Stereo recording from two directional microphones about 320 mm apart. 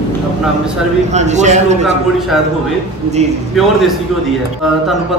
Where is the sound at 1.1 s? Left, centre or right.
Right.